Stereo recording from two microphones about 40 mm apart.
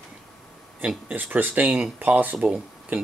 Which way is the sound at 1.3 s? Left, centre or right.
Right.